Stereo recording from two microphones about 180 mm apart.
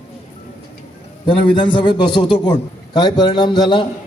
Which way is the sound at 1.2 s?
25° left (ahead or behind).